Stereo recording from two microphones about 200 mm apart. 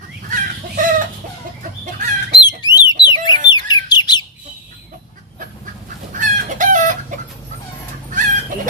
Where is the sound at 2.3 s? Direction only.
20° left (ahead or behind).